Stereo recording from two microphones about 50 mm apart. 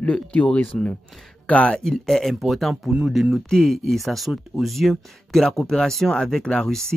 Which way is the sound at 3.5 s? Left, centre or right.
Centre.